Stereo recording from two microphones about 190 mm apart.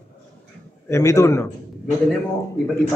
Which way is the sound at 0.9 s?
15° left (ahead or behind).